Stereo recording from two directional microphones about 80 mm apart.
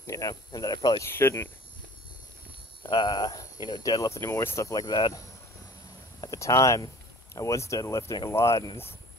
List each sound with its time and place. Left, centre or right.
0.0 s speech: left
1.0 s speech: left
2.8 s speech: left
4.1 s speech: left
4.8 s speech: left
6.2 s speech: left